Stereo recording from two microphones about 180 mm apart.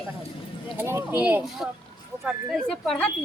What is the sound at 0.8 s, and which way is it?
Speech, 15° right (ahead or behind).